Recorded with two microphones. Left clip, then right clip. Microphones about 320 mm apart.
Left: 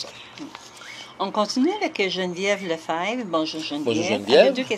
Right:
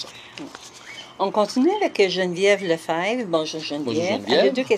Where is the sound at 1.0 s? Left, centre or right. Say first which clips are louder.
Right 3 dB; right.